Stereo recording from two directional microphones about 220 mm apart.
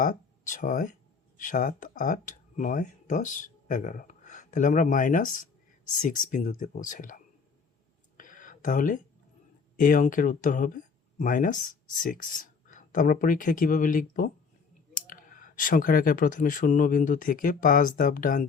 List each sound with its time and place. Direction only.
0.0 s speech: 35° left (ahead or behind)
8.2 s a sound: 35° left (ahead or behind)
9.7 s speech: 40° left (ahead or behind)